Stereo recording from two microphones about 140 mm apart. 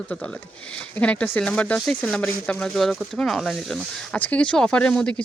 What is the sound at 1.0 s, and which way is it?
Speech, 10° left (ahead or behind).